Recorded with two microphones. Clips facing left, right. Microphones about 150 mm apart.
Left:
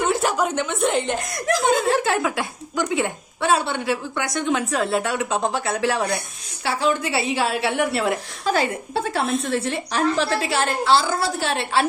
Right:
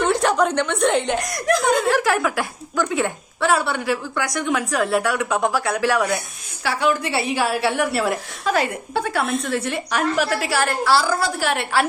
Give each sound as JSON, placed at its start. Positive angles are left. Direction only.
{"t": 0.1, "sound": "a woman's voice", "side_deg": 5}
{"t": 1.8, "sound": "a woman's voice", "side_deg": 25}